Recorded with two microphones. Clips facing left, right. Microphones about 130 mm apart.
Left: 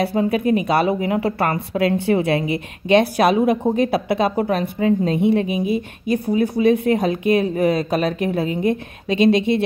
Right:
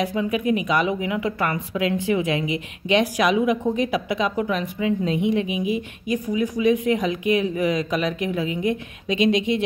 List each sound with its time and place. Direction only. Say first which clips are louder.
0.0 s a woman's voice: left 4 dB; 35° left (ahead or behind)